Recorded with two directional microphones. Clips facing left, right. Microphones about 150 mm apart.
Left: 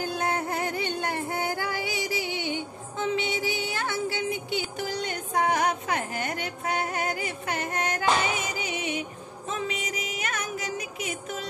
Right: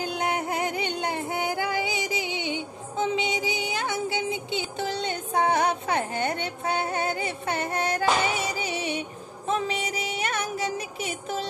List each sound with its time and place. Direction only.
0.0 s music: 20° right (ahead or behind)